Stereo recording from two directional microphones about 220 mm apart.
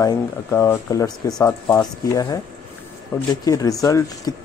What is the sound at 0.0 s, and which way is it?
Speech, 15° left (ahead or behind).